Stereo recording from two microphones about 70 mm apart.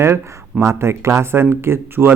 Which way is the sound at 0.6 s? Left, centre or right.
Right.